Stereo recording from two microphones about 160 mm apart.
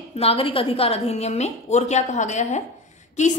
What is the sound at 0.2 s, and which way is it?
A woman's voice, 35° left (ahead or behind).